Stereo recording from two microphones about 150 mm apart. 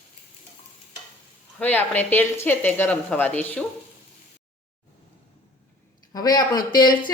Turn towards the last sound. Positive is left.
turn(degrees=30)  # may be behind; listen again after turning